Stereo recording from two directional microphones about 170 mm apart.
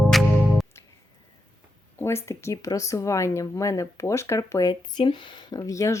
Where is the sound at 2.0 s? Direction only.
15° left (ahead or behind).